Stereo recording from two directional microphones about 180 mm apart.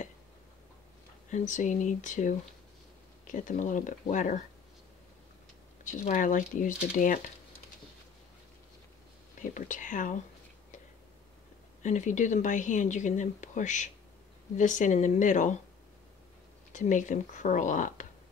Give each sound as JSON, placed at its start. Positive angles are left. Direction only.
{"t": 1.3, "sound": "speech", "side_deg": 40}
{"t": 5.9, "sound": "speech", "side_deg": 45}
{"t": 9.4, "sound": "speech", "side_deg": 45}
{"t": 11.8, "sound": "speech", "side_deg": 45}
{"t": 16.7, "sound": "speech", "side_deg": 45}